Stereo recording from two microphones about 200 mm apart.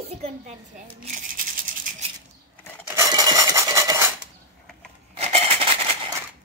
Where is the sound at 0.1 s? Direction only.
30° right (ahead or behind).